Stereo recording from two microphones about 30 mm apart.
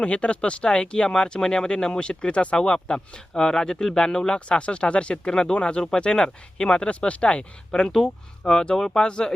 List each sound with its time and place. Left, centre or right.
0.0 s speech: left
2.6 s speech: left
4.3 s speech: left
7.7 s speech: left
7.9 s speech: centre
9.0 s speech: left